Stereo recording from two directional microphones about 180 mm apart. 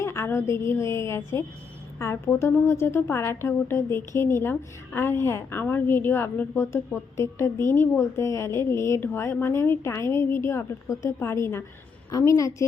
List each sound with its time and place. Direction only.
0.0 s a woman's voice: 15° left (ahead or behind)